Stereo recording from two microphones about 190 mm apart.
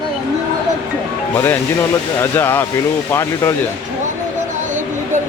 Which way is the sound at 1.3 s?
10° left (ahead or behind).